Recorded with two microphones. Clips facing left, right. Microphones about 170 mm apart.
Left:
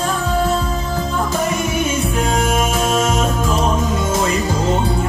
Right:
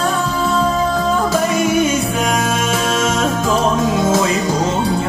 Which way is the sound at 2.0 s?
85° right.